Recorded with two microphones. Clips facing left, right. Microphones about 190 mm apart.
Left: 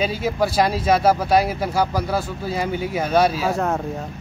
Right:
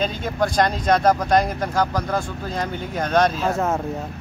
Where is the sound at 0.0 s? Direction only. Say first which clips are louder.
Left 2 dB; 5° left (ahead or behind).